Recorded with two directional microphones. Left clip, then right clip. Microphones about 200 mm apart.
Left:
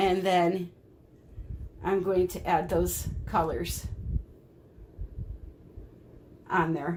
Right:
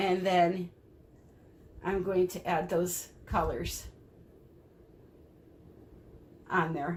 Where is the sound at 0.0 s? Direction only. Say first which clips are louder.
Left 2 dB; 40° left (ahead or behind).